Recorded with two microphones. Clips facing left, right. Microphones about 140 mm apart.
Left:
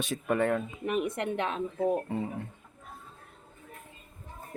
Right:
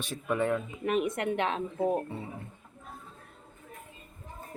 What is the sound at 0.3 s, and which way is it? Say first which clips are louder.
Speech: left 1 dB; 55° left (ahead or behind).